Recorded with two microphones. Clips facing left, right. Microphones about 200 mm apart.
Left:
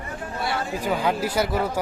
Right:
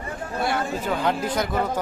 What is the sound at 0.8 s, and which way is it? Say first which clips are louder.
Speech: left 1 dB; 10° left (ahead or behind).